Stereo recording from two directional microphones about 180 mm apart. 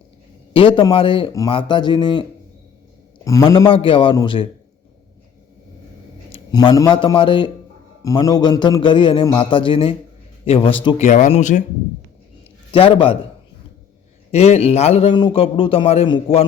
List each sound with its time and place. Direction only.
0.5 s a man's voice: 30° left (ahead or behind)
3.2 s a man's voice: 20° left (ahead or behind)
3.7 s a man's voice: 30° left (ahead or behind)
6.3 s a man's voice: 25° left (ahead or behind); by 11.6 s 40° left (ahead or behind)
12.7 s a man's voice: 30° left (ahead or behind)
14.3 s a man's voice: 35° left (ahead or behind)